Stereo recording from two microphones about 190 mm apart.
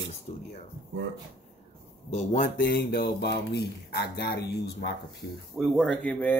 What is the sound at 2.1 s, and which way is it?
Speech, 45° left (ahead or behind).